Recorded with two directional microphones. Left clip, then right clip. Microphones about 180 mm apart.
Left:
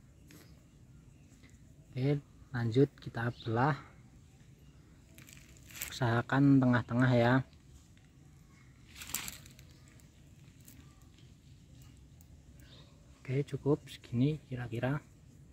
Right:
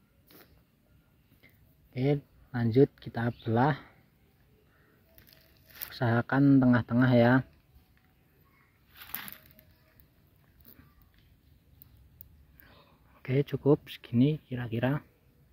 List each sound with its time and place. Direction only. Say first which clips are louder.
2.0 s speech: right 5 dB; 35° right (ahead or behind)
5.9 s speech: right 3 dB; 20° right (ahead or behind)
13.2 s speech: right 7 dB; 45° right (ahead or behind)